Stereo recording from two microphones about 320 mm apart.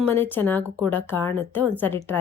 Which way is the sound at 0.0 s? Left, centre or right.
Centre.